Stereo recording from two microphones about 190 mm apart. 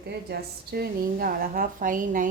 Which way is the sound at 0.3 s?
55° right (ahead or behind).